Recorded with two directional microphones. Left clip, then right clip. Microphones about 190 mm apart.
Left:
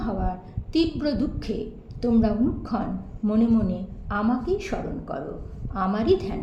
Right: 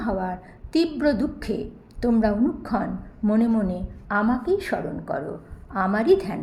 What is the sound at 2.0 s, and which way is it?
A woman's voice, 30° right (ahead or behind).